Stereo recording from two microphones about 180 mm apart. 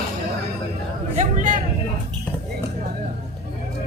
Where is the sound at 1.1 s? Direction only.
45° right (ahead or behind).